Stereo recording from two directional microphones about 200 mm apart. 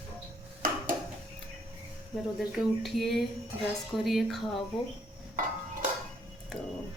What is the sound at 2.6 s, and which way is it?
A woman's voice, centre (ahead or behind).